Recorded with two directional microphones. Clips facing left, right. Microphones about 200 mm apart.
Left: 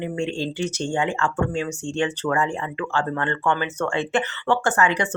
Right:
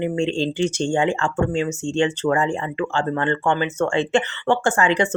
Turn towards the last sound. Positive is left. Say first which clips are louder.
# right 3 dB
turn(degrees=-25)  # may be behind; listen again after turning